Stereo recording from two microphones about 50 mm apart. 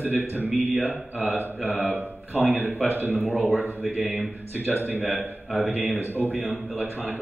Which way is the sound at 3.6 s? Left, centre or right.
Left.